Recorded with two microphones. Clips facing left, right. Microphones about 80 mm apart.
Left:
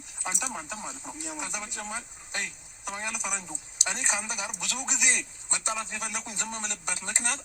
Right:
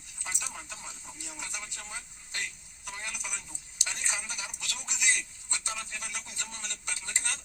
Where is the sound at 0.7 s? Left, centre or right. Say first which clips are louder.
Left 8 dB; left.